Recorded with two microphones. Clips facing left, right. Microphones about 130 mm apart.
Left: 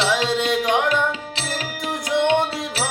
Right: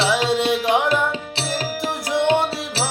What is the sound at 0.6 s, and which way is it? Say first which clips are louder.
Music: right 1 dB; 35° right (ahead or behind).